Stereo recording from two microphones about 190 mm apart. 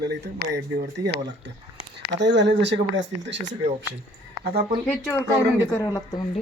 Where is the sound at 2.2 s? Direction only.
65° right (ahead or behind).